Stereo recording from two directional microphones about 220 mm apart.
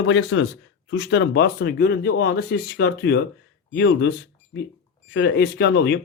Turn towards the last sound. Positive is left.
turn(degrees=50)  # may be behind; listen again after turning